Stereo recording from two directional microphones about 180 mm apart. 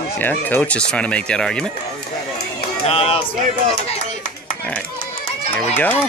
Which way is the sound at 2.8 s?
30° left (ahead or behind).